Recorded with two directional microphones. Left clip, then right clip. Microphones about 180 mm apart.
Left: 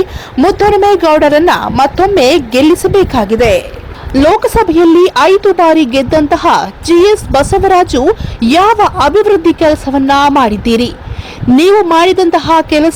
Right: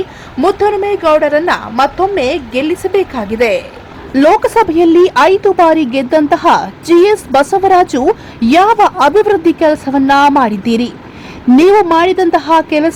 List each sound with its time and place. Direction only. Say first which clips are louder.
0.3 s a woman's voice: left 3 dB; 20° left (ahead or behind)